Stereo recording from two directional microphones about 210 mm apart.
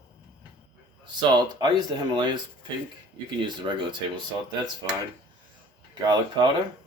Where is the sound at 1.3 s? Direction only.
20° right (ahead or behind).